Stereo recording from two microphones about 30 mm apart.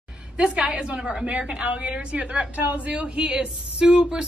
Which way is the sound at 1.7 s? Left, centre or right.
Right.